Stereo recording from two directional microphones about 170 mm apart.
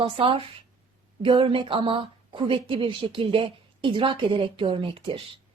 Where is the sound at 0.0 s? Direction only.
30° right (ahead or behind).